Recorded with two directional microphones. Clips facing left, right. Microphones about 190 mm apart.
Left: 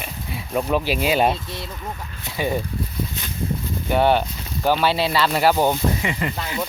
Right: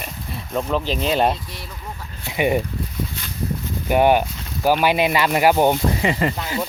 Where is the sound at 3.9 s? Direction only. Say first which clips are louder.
Right 2 dB; 10° right (ahead or behind).